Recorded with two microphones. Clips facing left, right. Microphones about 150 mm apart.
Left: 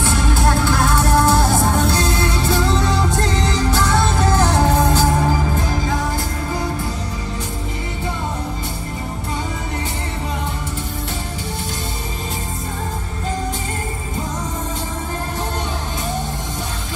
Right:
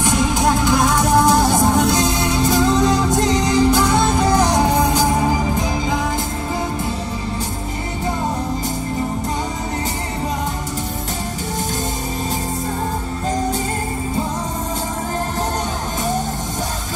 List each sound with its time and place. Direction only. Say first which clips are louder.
0.0 s music: right 2 dB; 15° right (ahead or behind)